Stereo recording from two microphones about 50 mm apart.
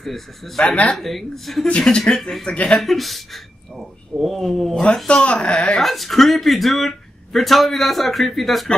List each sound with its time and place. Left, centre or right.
0.0 s speech: centre
0.6 s speech: left
0.9 s speech: centre
1.8 s speech: centre
2.8 s speech: centre
5.0 s speech: left
5.8 s speech: centre